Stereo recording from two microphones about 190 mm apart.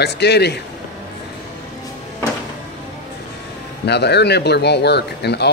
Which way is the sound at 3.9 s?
60° left (ahead or behind).